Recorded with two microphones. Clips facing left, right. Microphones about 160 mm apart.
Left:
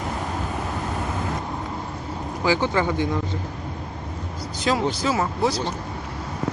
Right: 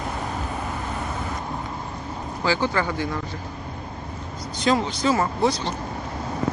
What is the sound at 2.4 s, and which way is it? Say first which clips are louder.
Speech: left 2 dB; 15° left (ahead or behind).